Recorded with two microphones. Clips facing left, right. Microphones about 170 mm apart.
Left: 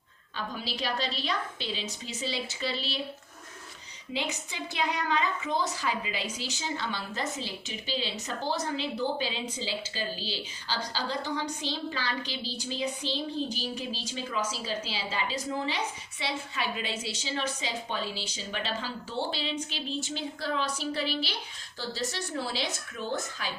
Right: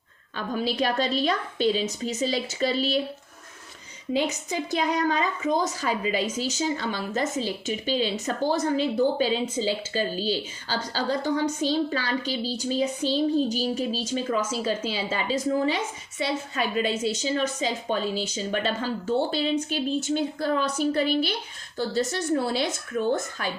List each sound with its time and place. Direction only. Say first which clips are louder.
0.3 s a woman's voice: right 9 dB; 50° right (ahead or behind)
4.1 s a woman's voice: right 9 dB; 45° right (ahead or behind)